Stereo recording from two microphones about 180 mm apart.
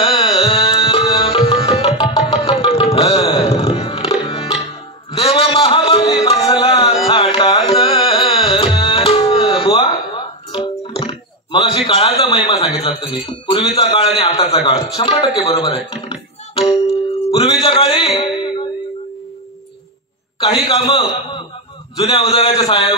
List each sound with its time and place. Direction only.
0.1 s tabla: 30° left (ahead or behind)
1.0 s music: 25° left (ahead or behind)
2.4 s tabla: 30° left (ahead or behind)
3.3 s music: 30° left (ahead or behind)
9.5 s a sound: 30° left (ahead or behind)
9.8 s music: 25° left (ahead or behind)
12.2 s speech: 30° left (ahead or behind)
15.5 s music: 25° left (ahead or behind)
17.4 s speech: 35° left (ahead or behind)
20.3 s speech: 30° left (ahead or behind)